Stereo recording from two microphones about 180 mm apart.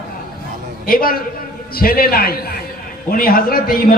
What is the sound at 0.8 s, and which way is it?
A man's voice, 55° left (ahead or behind).